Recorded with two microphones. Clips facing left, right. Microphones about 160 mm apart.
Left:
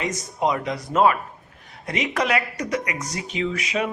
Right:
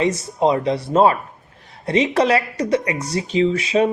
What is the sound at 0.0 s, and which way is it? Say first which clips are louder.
Speech: right 6 dB; 30° right (ahead or behind).